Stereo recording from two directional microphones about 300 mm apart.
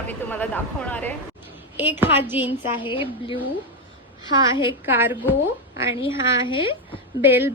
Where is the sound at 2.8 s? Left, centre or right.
Centre.